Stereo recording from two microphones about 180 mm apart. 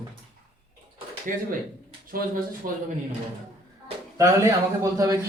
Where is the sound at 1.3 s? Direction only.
45° right (ahead or behind).